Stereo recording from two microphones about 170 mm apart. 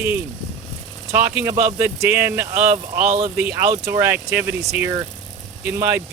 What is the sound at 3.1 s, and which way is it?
Speech, 40° right (ahead or behind).